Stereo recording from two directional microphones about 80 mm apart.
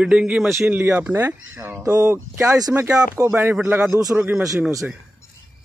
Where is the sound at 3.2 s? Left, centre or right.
Right.